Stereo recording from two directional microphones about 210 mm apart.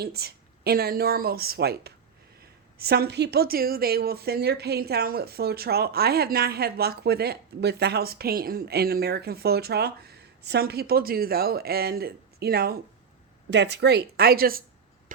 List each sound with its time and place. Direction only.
0.0 s a woman's voice: 50° right (ahead or behind)